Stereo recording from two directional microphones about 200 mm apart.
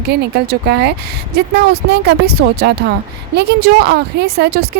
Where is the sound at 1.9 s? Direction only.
55° right (ahead or behind).